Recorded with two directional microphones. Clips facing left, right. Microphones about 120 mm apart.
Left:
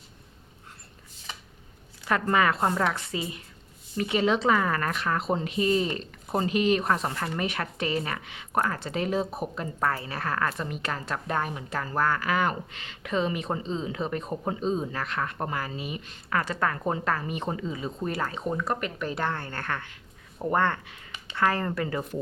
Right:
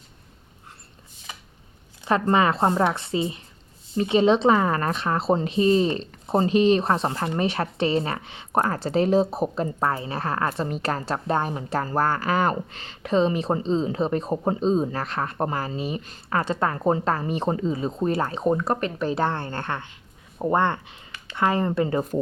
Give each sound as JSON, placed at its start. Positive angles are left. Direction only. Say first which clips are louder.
{"t": 2.0, "sound": "speech", "louder": "right 4 dB", "side_deg": -25}